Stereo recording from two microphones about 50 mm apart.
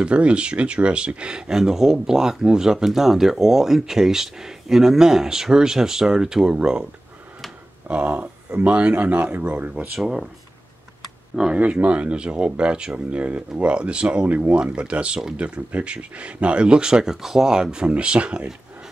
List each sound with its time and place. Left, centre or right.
0.0 s speech: right
7.9 s speech: right
10.0 s speech: centre
11.3 s speech: centre
11.6 s speech: right
14.5 s speech: right